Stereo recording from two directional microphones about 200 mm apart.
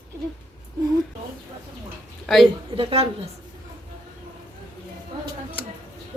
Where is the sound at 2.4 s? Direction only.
25° right (ahead or behind).